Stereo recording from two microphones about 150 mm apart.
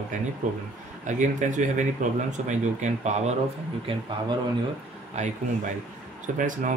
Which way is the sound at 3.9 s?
35° right (ahead or behind).